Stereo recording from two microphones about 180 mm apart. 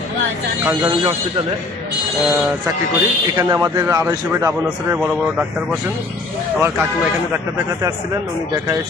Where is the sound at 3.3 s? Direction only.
20° right (ahead or behind).